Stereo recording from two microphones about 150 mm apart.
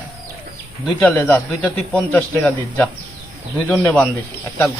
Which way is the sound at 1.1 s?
15° left (ahead or behind).